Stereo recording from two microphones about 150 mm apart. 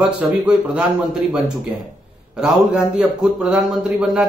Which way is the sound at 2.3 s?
5° right (ahead or behind).